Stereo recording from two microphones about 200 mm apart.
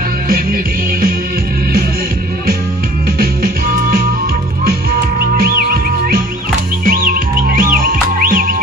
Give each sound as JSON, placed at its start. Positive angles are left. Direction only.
{"t": 3.2, "sound": "music", "side_deg": -50}
{"t": 5.4, "sound": "music", "side_deg": -50}